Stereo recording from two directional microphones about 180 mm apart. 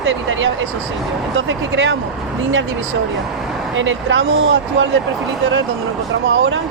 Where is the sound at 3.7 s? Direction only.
90° right.